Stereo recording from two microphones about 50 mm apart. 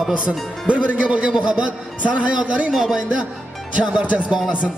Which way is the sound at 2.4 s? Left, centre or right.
Right.